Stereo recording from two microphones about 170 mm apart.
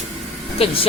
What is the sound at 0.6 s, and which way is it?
Speech, 35° left (ahead or behind).